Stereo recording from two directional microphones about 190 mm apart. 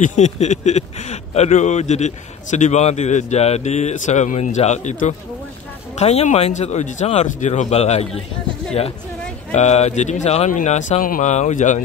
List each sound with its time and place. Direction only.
0.0 s speech: 40° left (ahead or behind)
9.5 s speech: 35° left (ahead or behind)